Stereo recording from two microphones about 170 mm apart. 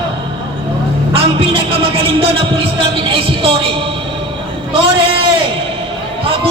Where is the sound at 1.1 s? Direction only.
35° right (ahead or behind).